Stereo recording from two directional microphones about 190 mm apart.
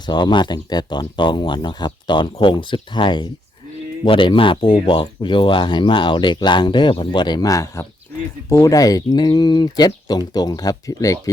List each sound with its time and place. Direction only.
0.0 s speech: 25° left (ahead or behind)